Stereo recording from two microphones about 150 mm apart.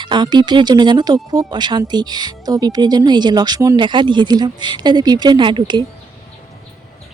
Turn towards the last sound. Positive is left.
turn(degrees=-30)  # may be behind; listen again after turning